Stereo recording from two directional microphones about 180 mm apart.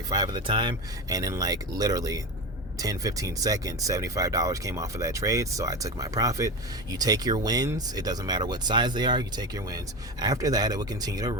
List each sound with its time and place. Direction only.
0.1 s speech: 20° right (ahead or behind)